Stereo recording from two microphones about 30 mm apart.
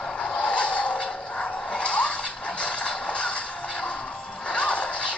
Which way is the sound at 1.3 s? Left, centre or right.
Left.